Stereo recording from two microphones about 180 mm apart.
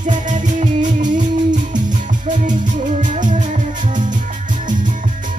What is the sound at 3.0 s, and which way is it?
Music, 45° right (ahead or behind).